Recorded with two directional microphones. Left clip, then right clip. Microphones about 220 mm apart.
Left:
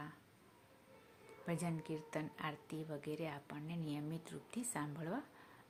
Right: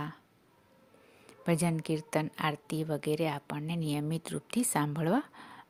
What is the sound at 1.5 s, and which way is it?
A woman's voice, 45° right (ahead or behind).